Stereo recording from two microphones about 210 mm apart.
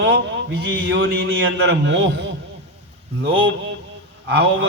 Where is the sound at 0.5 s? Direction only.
55° right (ahead or behind).